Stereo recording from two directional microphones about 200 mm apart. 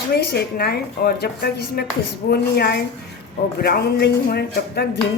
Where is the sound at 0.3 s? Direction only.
50° left (ahead or behind).